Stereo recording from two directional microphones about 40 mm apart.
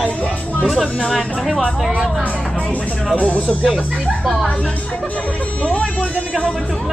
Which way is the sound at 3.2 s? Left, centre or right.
Left.